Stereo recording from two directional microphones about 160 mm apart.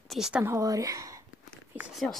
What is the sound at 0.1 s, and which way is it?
Speech, 5° right (ahead or behind).